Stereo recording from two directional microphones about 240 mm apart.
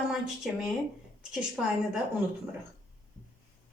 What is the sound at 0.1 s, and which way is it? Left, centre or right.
A woman's voice, centre.